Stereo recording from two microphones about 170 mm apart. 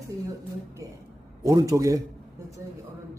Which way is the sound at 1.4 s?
20° right (ahead or behind).